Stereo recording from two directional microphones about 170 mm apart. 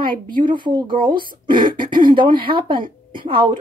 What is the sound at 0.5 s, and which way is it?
Speech, 25° right (ahead or behind).